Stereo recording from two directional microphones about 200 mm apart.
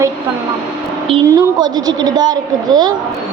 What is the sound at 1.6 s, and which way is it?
A woman's voice, 20° right (ahead or behind).